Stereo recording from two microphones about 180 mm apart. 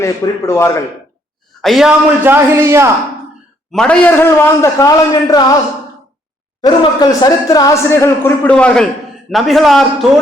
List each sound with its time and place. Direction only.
0.0 s speech: 15° left (ahead or behind)
1.6 s a man's voice: centre (ahead or behind)
2.2 s a man's voice: 15° right (ahead or behind)
3.7 s speech: 5° left (ahead or behind); by 5.5 s 20° left (ahead or behind)
6.6 s a man's voice: 20° left (ahead or behind); by 10.1 s centre (ahead or behind)